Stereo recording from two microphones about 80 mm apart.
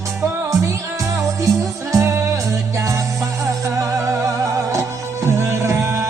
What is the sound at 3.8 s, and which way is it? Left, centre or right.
Music, right.